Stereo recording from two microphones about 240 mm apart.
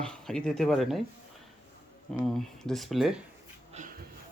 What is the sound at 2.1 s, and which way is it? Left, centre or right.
Speech, centre.